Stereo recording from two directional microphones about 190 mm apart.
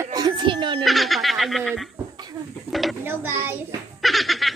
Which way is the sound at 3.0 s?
10° right (ahead or behind).